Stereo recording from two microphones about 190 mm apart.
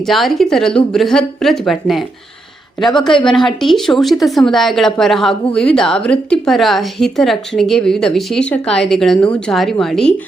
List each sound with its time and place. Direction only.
0.0 s a woman's voice: centre (ahead or behind)